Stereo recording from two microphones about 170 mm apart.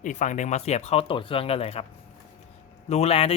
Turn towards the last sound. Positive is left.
turn(degrees=35)  # may be behind; listen again after turning